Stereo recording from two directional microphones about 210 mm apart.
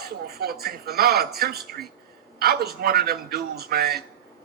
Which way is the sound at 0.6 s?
50° right (ahead or behind).